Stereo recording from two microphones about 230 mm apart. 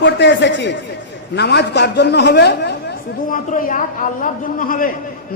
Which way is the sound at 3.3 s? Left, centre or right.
Left.